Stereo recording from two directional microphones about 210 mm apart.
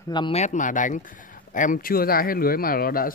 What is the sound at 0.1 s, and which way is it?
Speech, 25° left (ahead or behind).